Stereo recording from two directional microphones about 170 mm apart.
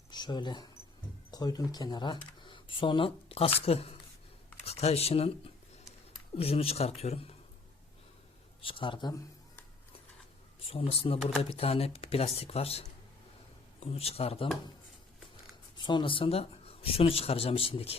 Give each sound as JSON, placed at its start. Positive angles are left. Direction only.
{"t": 0.1, "sound": "speech", "side_deg": 25}
{"t": 8.6, "sound": "speech", "side_deg": 30}
{"t": 10.6, "sound": "speech", "side_deg": 35}
{"t": 15.8, "sound": "speech", "side_deg": 30}